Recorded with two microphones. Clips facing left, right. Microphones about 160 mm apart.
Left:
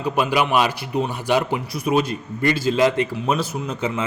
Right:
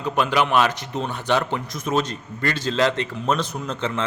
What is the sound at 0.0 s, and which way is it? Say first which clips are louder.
Speech: left 1 dB; 10° left (ahead or behind).